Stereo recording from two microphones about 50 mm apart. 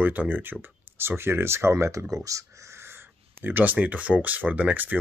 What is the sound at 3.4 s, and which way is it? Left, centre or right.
Speech, right.